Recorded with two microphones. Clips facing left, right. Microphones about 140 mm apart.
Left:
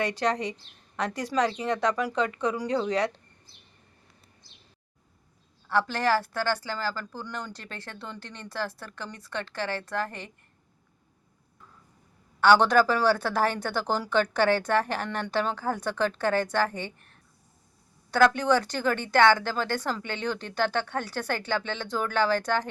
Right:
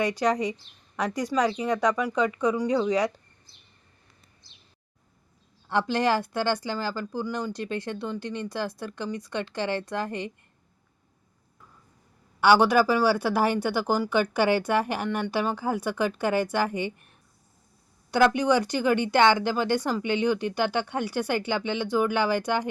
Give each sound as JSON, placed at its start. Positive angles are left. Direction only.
{"t": 1.4, "sound": "speech", "side_deg": -10}
{"t": 5.6, "sound": "speech", "side_deg": -20}
{"t": 12.4, "sound": "speech", "side_deg": -10}